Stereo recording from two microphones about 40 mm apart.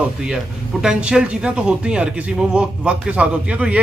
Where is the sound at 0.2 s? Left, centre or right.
Centre.